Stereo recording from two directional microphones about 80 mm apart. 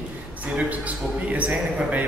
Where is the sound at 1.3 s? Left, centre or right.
Centre.